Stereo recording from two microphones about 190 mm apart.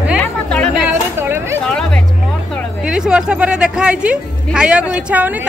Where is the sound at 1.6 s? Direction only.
5° left (ahead or behind).